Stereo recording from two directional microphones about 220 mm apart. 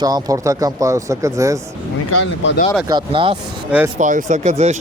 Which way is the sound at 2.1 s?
60° left (ahead or behind).